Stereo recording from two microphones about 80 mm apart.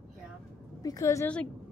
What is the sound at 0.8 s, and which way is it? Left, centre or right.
Speech, left.